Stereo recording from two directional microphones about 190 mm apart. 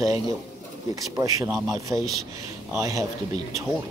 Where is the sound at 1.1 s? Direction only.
15° right (ahead or behind).